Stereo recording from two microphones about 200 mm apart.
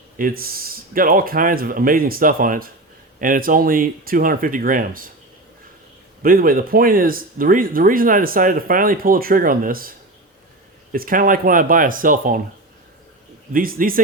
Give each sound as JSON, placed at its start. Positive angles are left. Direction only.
{"t": 0.2, "sound": "speech", "side_deg": -45}
{"t": 6.2, "sound": "speech", "side_deg": -45}
{"t": 10.9, "sound": "speech", "side_deg": -45}
{"t": 13.5, "sound": "speech", "side_deg": -45}